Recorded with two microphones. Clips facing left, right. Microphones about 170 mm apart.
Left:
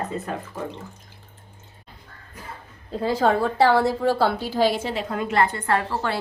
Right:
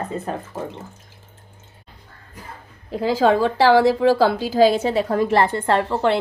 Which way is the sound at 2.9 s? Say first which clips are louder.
Right 3 dB; 90° right.